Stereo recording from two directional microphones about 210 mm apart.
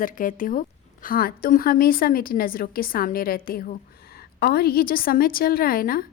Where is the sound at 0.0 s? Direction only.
40° left (ahead or behind).